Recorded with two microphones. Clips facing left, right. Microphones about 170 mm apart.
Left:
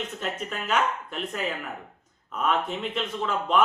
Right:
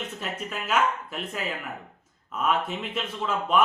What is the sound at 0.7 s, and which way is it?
A man's voice, 5° right (ahead or behind).